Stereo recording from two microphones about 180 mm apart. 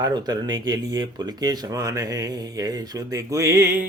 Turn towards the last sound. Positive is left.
turn(degrees=-15)  # may be behind; listen again after turning